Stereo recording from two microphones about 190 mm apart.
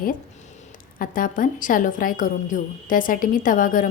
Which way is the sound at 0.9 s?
45° left (ahead or behind).